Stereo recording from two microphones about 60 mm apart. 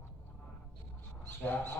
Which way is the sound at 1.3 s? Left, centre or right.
Left.